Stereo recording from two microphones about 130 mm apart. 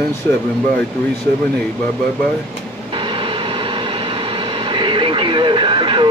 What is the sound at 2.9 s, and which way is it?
Vehicle, 40° right (ahead or behind).